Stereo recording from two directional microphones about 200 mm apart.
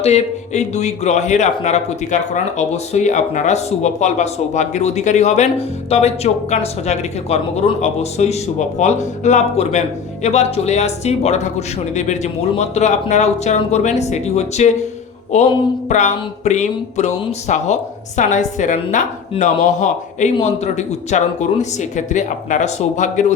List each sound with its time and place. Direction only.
0.0 s speech: 35° left (ahead or behind)